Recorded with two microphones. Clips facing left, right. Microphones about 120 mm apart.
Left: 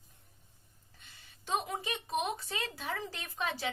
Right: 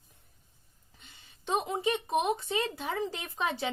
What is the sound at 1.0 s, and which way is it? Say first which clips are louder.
Speech: right 2 dB; 20° right (ahead or behind).